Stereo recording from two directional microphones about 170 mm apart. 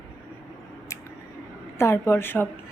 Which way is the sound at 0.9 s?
15° left (ahead or behind).